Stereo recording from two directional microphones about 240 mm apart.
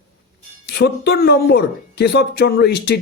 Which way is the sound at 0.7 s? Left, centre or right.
Left.